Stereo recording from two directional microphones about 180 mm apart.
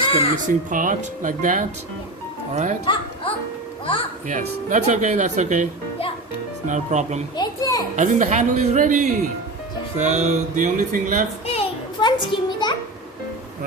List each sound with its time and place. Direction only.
0.0 s crow: 30° left (ahead or behind)
0.4 s speech: 45° right (ahead or behind)
2.8 s a child's voice: 30° left (ahead or behind)
4.3 s speech: 45° right (ahead or behind)
6.7 s speech: 40° right (ahead or behind)
7.3 s children playing: 20° left (ahead or behind)
7.9 s speech: 45° right (ahead or behind)
11.5 s a sound: 25° left (ahead or behind)